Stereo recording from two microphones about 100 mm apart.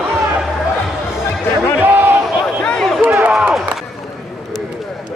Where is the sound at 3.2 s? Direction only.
10° right (ahead or behind).